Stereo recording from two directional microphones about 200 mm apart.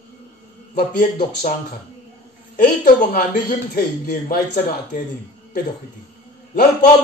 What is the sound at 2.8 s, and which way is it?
Speech, 40° left (ahead or behind).